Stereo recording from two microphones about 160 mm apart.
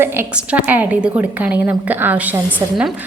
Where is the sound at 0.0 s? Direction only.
15° right (ahead or behind).